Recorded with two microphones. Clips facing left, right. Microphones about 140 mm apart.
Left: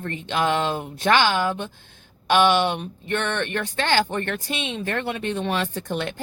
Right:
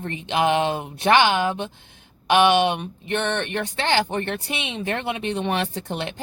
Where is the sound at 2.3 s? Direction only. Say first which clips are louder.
Right 1 dB; 15° right (ahead or behind).